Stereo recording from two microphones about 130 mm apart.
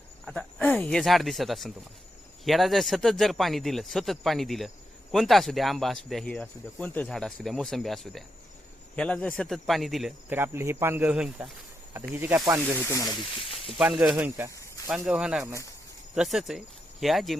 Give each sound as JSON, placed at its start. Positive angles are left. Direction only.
{"t": 0.3, "sound": "speech", "side_deg": 5}
{"t": 10.2, "sound": "speech", "side_deg": -15}
{"t": 13.7, "sound": "speech", "side_deg": -5}
{"t": 14.3, "sound": "speech", "side_deg": -20}
{"t": 14.8, "sound": "speech", "side_deg": -5}